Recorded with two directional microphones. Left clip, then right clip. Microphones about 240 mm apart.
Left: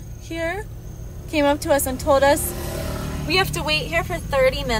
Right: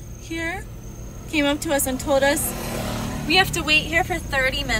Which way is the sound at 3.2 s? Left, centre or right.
Centre.